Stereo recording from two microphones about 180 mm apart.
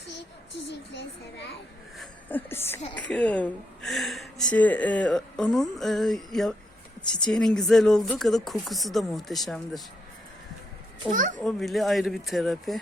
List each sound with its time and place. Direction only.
2.0 s a woman's voice: 10° left (ahead or behind)
11.1 s a child's voice: 45° right (ahead or behind)
11.4 s a woman's voice: centre (ahead or behind)